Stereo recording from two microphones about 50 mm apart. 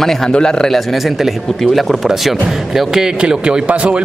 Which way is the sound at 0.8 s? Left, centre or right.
Centre.